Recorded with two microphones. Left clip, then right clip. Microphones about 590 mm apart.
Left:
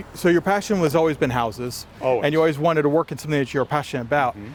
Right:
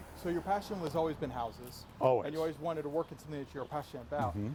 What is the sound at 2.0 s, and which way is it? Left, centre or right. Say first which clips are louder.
Speech: left 8 dB; right.